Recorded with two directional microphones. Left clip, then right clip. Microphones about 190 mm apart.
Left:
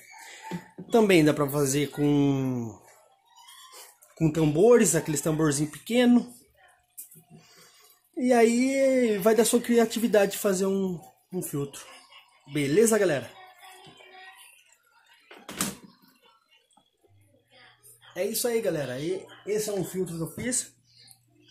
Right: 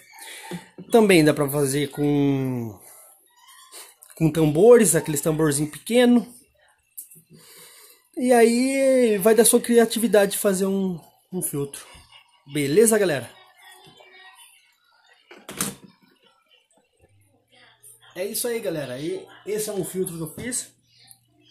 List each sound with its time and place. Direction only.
0.8 s speech: 25° right (ahead or behind)
4.1 s speech: 25° right (ahead or behind)
8.1 s speech: 20° right (ahead or behind)
18.1 s speech: centre (ahead or behind)
20.0 s speech: centre (ahead or behind)